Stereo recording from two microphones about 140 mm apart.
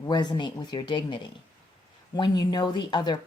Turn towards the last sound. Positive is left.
turn(degrees=30)  # may be behind; listen again after turning